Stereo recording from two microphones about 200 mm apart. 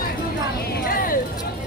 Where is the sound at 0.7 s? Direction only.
45° left (ahead or behind).